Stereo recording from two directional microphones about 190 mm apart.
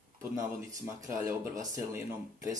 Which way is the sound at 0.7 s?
20° right (ahead or behind).